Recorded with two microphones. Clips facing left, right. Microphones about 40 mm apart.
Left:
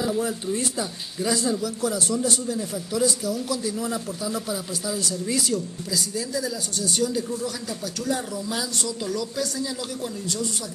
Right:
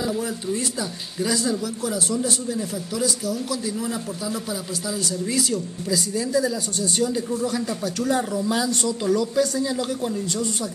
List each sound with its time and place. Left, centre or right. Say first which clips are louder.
1.2 s speech: right 1 dB; centre
1.6 s speech: even; centre
5.9 s speech: right 6 dB; centre